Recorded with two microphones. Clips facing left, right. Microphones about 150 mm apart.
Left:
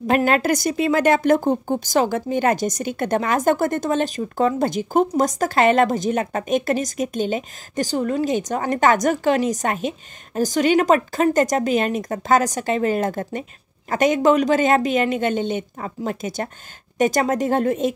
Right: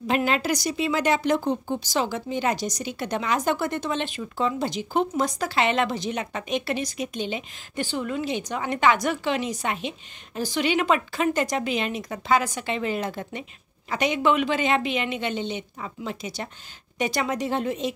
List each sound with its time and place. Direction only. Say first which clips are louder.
0.0 s a woman's voice: left 6 dB; 50° left (ahead or behind)